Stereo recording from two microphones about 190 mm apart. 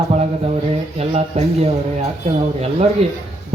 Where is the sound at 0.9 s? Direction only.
35° right (ahead or behind).